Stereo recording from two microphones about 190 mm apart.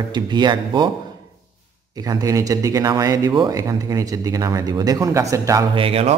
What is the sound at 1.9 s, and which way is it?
Speech, 20° right (ahead or behind).